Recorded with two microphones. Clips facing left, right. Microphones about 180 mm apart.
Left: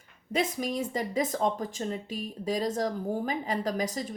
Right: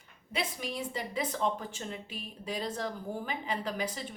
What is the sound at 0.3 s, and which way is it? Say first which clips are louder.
Speech: left 7 dB; 45° left (ahead or behind).